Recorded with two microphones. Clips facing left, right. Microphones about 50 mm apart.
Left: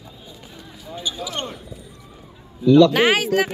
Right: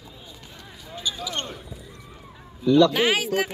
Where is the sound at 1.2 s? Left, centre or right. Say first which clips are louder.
Left 3 dB; centre.